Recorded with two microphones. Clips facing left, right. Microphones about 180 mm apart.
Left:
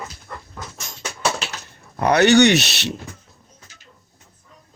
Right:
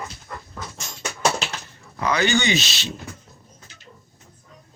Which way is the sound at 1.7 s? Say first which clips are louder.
Left 7 dB; 60° left (ahead or behind).